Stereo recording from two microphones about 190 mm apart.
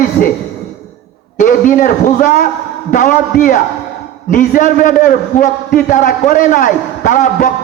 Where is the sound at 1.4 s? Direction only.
45° left (ahead or behind).